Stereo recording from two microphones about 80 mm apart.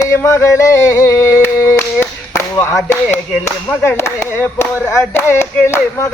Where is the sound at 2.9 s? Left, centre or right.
Left.